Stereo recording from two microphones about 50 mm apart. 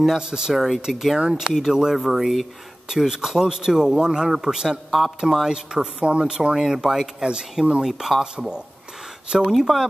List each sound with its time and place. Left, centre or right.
0.0 s a man's voice: centre
7.8 s speech: centre
8.2 s a man's voice: centre